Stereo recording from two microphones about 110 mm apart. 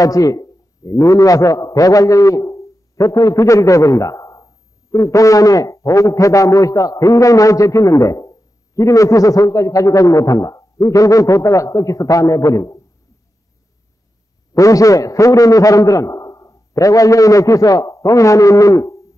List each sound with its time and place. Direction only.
0.0 s a man's voice: 30° left (ahead or behind)
14.5 s a man's voice: 30° left (ahead or behind)